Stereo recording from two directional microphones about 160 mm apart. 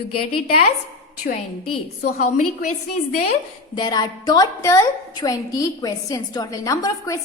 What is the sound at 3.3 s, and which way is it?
A woman's voice, 30° left (ahead or behind).